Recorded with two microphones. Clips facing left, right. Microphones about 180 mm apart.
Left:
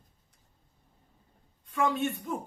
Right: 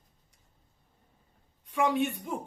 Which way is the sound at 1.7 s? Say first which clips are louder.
Right 2 dB; 15° right (ahead or behind).